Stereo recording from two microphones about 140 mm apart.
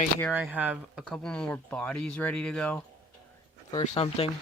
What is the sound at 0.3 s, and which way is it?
Speech, 5° right (ahead or behind).